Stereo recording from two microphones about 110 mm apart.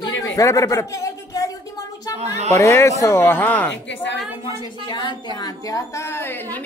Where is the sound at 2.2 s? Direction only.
90° right.